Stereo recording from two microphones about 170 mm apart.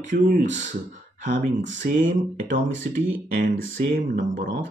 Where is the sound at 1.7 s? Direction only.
50° right (ahead or behind).